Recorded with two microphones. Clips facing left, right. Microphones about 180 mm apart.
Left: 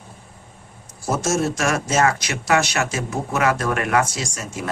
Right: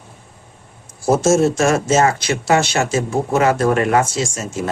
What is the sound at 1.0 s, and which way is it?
Speech, 30° right (ahead or behind).